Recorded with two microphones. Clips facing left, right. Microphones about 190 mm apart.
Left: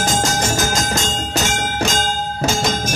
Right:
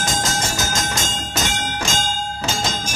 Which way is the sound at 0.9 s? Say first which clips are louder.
Left 4 dB; 40° left (ahead or behind).